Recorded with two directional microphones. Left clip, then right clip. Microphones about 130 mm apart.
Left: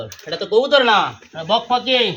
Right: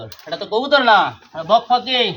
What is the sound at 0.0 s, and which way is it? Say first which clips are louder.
Speech: left 1 dB; 25° right (ahead or behind).